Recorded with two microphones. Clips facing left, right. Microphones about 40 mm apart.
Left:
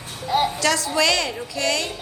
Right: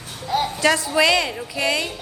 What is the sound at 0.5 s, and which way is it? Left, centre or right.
A woman's voice, centre.